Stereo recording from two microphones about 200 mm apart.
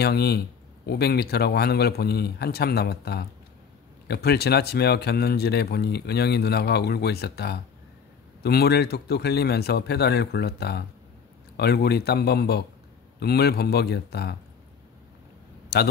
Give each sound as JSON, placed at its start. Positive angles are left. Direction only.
{"t": 0.0, "sound": "speech", "side_deg": 55}
{"t": 15.7, "sound": "a man's voice", "side_deg": 55}